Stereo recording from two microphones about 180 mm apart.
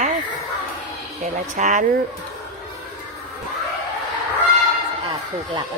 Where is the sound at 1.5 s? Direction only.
45° right (ahead or behind).